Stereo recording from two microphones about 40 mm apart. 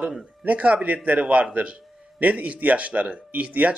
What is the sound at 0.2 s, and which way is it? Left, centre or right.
A man's voice, right.